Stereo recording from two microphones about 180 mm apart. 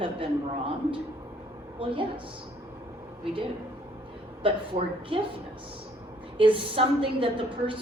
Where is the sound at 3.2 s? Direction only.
30° right (ahead or behind).